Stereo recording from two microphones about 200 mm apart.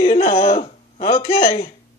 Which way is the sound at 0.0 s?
25° left (ahead or behind).